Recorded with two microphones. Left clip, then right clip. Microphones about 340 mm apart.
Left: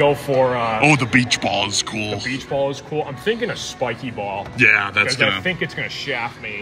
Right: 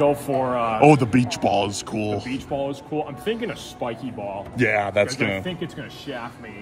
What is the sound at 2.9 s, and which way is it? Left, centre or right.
Speech, left.